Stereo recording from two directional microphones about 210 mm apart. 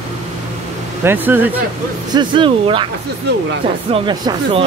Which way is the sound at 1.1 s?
10° right (ahead or behind).